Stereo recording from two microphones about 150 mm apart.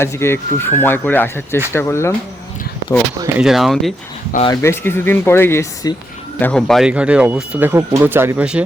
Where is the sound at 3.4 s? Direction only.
Centre (ahead or behind).